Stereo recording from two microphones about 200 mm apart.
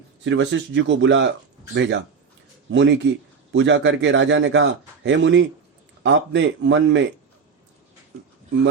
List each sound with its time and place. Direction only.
0.3 s a man's voice: 65° right (ahead or behind)